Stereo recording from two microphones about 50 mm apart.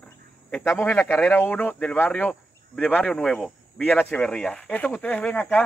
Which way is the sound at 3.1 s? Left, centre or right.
Centre.